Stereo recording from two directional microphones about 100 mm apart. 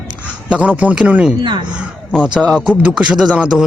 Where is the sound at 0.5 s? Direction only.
10° right (ahead or behind).